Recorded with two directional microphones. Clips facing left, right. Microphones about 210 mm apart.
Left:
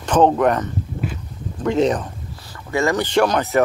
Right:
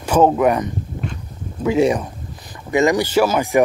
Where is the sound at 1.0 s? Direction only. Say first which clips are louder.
Left 2 dB; 5° left (ahead or behind).